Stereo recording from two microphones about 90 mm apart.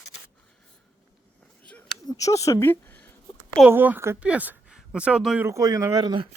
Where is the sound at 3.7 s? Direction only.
20° right (ahead or behind).